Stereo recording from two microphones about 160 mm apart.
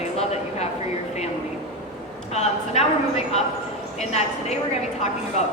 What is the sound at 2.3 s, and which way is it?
Speech, 45° left (ahead or behind).